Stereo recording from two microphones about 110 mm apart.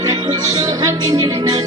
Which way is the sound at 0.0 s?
40° right (ahead or behind).